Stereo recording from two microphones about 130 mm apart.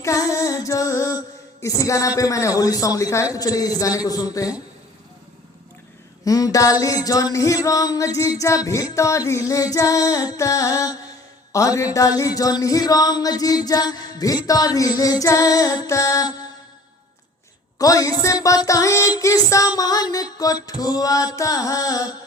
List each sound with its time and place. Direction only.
0.0 s a sound: 25° left (ahead or behind)
1.6 s mantra: 25° left (ahead or behind)
6.2 s mantra: 25° left (ahead or behind)
17.7 s mantra: 25° left (ahead or behind)